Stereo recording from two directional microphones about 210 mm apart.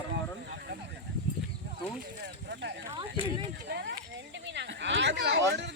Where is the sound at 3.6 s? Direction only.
55° right (ahead or behind).